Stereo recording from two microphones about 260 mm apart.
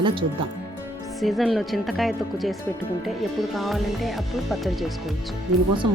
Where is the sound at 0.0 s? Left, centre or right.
Centre.